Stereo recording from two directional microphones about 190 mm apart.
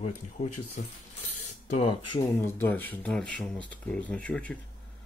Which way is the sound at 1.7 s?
35° left (ahead or behind).